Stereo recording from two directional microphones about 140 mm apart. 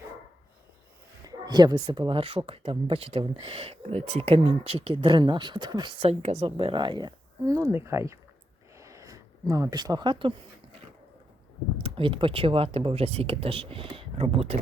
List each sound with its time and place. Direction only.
1.2 s speech: 25° right (ahead or behind)
6.0 s a woman's voice: 45° right (ahead or behind); by 8.2 s 20° right (ahead or behind)
8.7 s a sound: 20° right (ahead or behind)
11.8 s speech: 40° right (ahead or behind)